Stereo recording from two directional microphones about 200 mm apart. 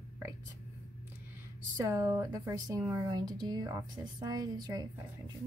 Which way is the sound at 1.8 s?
15° right (ahead or behind).